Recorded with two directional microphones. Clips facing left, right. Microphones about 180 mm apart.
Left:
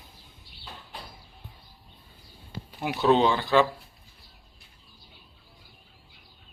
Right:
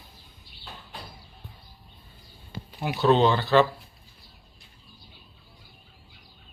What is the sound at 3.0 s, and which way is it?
Speech, 10° left (ahead or behind).